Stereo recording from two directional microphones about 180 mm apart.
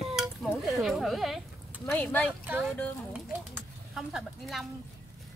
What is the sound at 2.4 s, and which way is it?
Speech, 10° right (ahead or behind).